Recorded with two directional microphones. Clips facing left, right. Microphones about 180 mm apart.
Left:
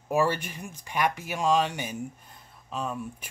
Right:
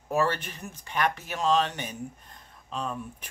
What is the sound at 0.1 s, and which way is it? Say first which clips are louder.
Speech: left 1 dB; 10° left (ahead or behind).